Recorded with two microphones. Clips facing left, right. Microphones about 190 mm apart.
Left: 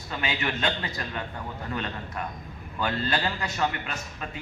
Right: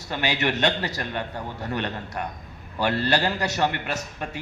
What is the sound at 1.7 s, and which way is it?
Speech, 35° right (ahead or behind).